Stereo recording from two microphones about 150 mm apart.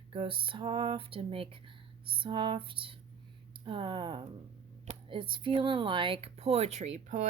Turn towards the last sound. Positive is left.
turn(degrees=-55)  # may be behind; listen again after turning